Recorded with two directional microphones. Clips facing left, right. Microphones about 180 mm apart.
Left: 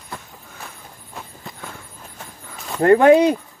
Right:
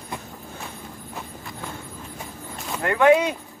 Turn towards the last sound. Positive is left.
turn(degrees=35)  # may be behind; listen again after turning